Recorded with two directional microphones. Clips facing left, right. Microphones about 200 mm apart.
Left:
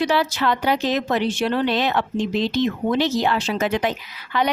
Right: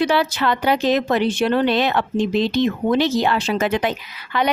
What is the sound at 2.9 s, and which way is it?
Speech, 60° right (ahead or behind).